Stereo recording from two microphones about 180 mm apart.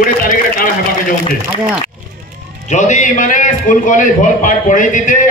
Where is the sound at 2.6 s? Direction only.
40° left (ahead or behind).